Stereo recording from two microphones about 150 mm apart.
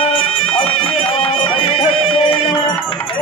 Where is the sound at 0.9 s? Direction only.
40° left (ahead or behind).